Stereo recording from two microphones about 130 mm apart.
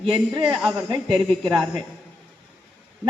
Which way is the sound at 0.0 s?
40° right (ahead or behind).